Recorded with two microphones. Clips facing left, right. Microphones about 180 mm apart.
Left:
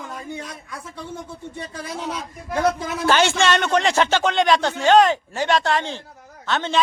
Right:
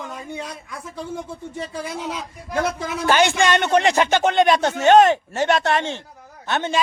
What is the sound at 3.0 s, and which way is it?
A man's voice, 15° right (ahead or behind).